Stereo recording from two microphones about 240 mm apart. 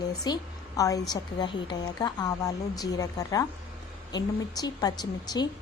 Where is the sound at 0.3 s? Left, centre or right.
Centre.